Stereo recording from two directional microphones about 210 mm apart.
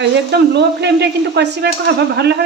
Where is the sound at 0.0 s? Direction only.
55° right (ahead or behind).